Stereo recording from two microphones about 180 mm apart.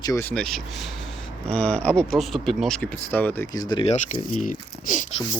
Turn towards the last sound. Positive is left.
turn(degrees=45)  # may be behind; listen again after turning